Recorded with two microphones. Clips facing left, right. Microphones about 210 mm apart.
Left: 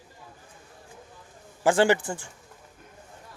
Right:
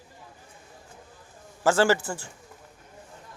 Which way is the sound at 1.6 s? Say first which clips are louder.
Left 1 dB; 15° left (ahead or behind).